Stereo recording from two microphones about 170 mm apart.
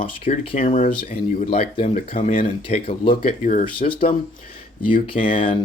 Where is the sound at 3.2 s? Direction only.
50° left (ahead or behind).